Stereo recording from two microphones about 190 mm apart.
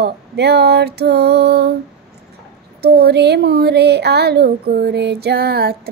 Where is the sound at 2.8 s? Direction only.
55° right (ahead or behind).